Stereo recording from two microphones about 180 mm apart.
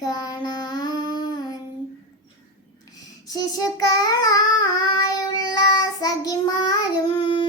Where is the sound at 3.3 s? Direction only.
20° left (ahead or behind).